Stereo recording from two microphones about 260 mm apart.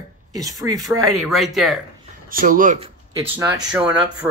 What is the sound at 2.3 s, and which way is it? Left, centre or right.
Speech, right.